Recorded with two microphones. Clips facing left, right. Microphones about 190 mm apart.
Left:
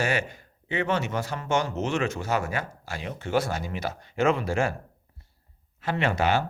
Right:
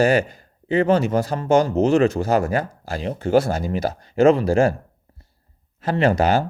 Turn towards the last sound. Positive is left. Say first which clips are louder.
# right 7 dB
turn(degrees=-40)  # may be behind; listen again after turning